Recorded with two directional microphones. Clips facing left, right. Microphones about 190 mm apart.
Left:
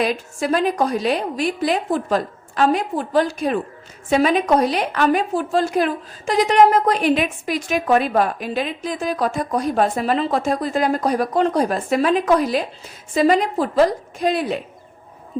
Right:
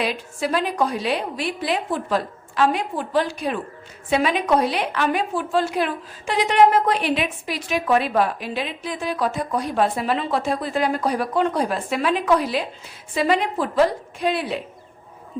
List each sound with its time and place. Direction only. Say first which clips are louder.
0.0 s a woman's voice: left 3 dB; 45° left (ahead or behind)